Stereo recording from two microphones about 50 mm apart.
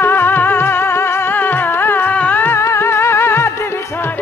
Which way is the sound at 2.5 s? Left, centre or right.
Left.